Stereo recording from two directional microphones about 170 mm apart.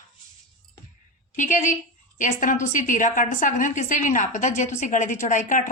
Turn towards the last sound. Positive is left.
turn(degrees=50)  # may be behind; listen again after turning